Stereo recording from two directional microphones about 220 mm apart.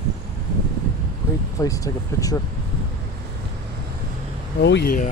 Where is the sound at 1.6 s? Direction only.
15° left (ahead or behind).